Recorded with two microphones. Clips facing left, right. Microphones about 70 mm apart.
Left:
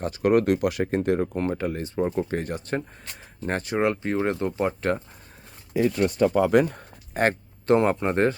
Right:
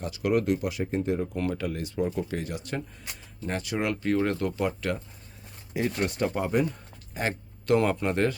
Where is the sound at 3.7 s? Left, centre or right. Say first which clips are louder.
Left 2 dB; left.